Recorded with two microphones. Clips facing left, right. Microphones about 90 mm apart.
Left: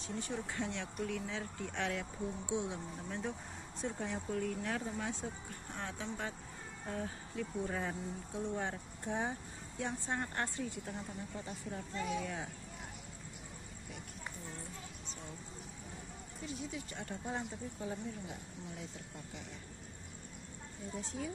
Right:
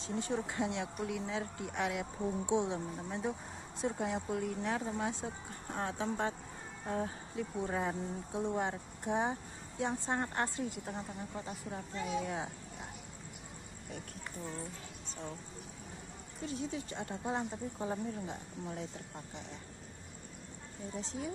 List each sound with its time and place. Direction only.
0.0 s speech: 25° right (ahead or behind)
5.7 s speech: 40° right (ahead or behind); by 12.4 s 25° right (ahead or behind)
16.9 s speech: 25° right (ahead or behind)
21.0 s speech: 25° right (ahead or behind)